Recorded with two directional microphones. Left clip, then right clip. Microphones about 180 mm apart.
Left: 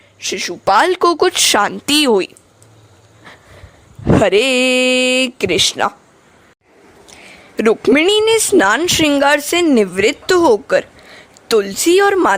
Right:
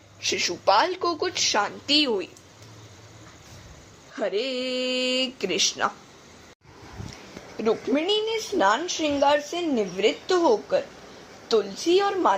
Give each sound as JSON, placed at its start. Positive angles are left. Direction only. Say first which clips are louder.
{"t": 0.2, "sound": "a woman's voice", "louder": "left 5 dB", "side_deg": 35}
{"t": 0.6, "sound": "speech", "louder": "left 10 dB", "side_deg": 55}
{"t": 4.2, "sound": "speech", "louder": "left 13 dB", "side_deg": 55}
{"t": 7.5, "sound": "speech", "louder": "left 12 dB", "side_deg": 55}